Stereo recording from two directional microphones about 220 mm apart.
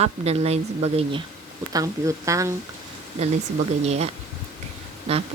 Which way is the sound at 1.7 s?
15° right (ahead or behind).